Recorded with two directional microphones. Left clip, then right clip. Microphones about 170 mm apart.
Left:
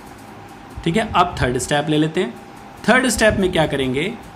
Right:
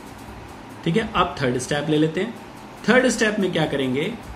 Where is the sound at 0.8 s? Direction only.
50° left (ahead or behind).